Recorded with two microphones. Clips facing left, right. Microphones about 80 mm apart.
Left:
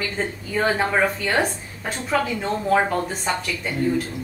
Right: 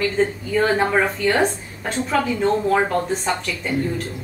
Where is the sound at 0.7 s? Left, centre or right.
Centre.